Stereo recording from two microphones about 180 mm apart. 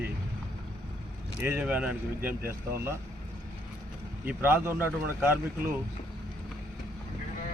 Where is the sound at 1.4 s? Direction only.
5° right (ahead or behind).